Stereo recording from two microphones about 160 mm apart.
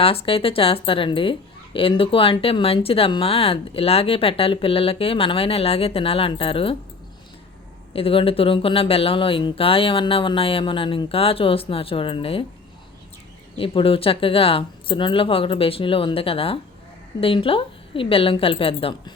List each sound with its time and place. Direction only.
0.0 s a woman's voice: 35° left (ahead or behind)
7.9 s a woman's voice: 35° left (ahead or behind)
13.6 s a woman's voice: 35° left (ahead or behind)